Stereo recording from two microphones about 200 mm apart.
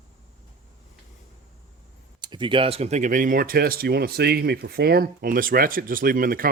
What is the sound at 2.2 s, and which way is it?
Speech, 25° right (ahead or behind).